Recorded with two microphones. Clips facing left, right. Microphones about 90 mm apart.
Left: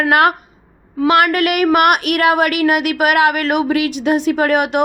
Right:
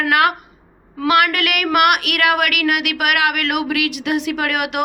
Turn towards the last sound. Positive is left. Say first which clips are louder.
# left 6 dB
turn(degrees=35)  # may be behind; listen again after turning